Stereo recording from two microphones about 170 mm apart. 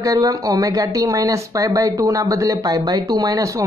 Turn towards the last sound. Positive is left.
turn(degrees=-20)  # may be behind; listen again after turning